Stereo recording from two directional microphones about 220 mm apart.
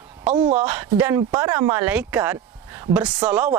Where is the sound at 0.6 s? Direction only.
10° right (ahead or behind).